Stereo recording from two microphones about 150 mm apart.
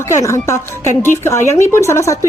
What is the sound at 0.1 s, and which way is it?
Speech, 20° left (ahead or behind).